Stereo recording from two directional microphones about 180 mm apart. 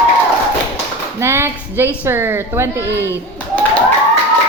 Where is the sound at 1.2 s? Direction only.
15° right (ahead or behind).